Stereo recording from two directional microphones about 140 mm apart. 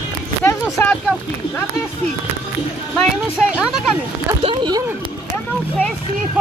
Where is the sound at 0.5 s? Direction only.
20° left (ahead or behind).